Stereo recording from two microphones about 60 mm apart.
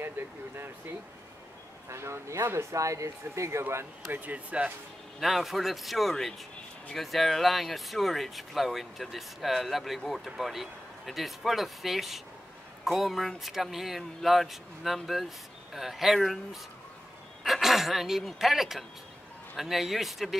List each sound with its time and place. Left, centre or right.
1.9 s speech: right
4.1 s speech: right
5.2 s speech: centre
17.4 s speech: centre